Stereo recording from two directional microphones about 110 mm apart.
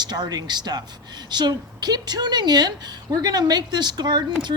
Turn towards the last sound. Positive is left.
turn(degrees=-40)  # may be behind; listen again after turning